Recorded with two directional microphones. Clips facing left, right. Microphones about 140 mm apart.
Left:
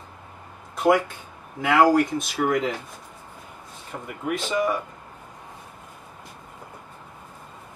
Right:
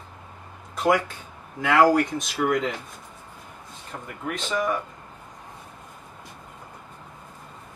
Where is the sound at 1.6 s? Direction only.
10° left (ahead or behind).